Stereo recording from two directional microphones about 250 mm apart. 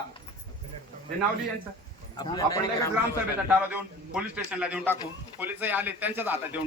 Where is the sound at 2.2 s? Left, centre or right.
Centre.